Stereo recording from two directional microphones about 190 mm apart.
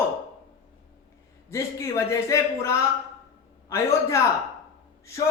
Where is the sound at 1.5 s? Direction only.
15° left (ahead or behind).